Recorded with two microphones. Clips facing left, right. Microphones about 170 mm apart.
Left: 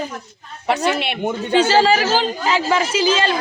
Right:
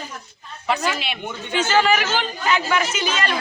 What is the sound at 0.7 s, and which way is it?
Speech, 65° left (ahead or behind).